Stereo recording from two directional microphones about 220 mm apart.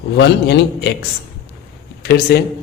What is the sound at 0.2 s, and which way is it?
Speech, 50° left (ahead or behind).